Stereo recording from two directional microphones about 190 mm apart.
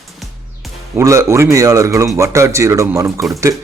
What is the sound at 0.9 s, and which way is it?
Speech, 15° right (ahead or behind).